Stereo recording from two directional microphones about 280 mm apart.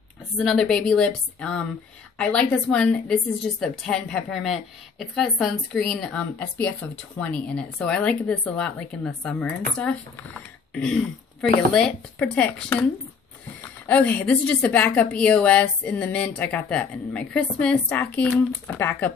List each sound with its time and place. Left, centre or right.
0.4 s a woman's voice: centre
10.7 s throat clearing: centre
11.7 s a woman's voice: centre